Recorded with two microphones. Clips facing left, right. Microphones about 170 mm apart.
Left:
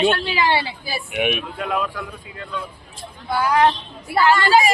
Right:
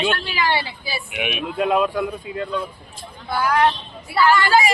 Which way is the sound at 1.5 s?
20° right (ahead or behind).